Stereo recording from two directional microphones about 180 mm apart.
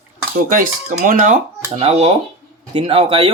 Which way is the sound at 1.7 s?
35° right (ahead or behind).